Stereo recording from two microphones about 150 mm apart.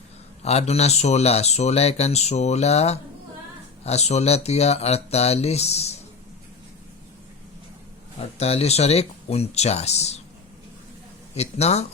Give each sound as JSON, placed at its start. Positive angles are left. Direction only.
{"t": 0.4, "sound": "speech", "side_deg": 45}
{"t": 8.4, "sound": "speech", "side_deg": 45}
{"t": 11.3, "sound": "speech", "side_deg": 45}